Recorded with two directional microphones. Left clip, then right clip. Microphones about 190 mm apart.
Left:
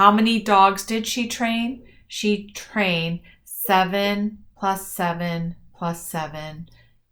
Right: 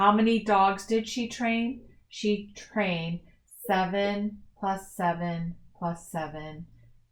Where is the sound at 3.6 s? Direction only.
25° left (ahead or behind).